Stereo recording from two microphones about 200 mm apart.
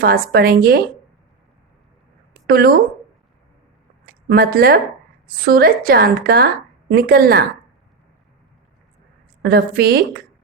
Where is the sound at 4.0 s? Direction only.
50° right (ahead or behind).